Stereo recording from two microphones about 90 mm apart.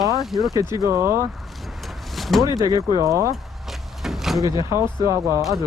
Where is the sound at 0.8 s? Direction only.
30° right (ahead or behind).